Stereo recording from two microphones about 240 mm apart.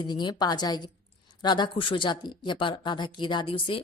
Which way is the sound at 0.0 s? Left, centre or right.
Centre.